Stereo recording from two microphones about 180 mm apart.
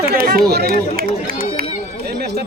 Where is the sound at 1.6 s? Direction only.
55° right (ahead or behind).